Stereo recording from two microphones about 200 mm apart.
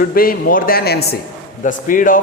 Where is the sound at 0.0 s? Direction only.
45° left (ahead or behind).